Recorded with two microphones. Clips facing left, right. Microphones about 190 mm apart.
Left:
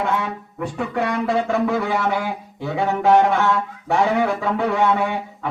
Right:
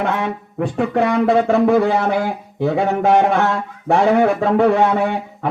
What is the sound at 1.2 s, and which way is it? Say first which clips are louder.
A man's voice: right 6 dB; 55° right (ahead or behind).